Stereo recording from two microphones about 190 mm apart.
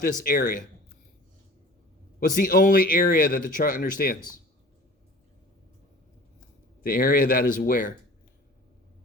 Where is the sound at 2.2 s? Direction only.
45° left (ahead or behind).